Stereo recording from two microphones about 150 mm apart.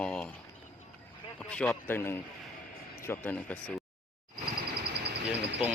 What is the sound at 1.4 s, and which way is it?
Speech, 5° left (ahead or behind).